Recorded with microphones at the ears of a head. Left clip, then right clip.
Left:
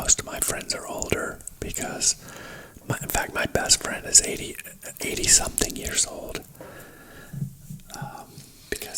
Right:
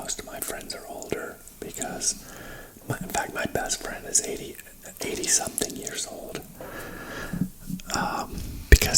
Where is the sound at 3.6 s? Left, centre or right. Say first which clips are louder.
Left 8 dB; left.